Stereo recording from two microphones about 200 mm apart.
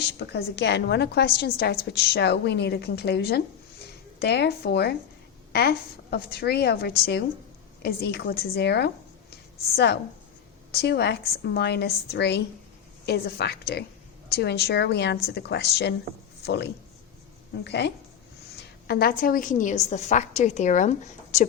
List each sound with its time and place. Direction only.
0.2 s a woman's voice: 55° left (ahead or behind); by 20.9 s 40° left (ahead or behind)